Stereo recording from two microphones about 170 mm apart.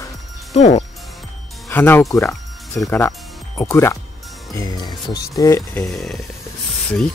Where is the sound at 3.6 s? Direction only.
15° left (ahead or behind).